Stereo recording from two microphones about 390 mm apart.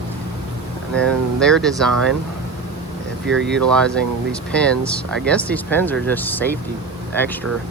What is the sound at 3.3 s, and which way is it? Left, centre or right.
Speech, right.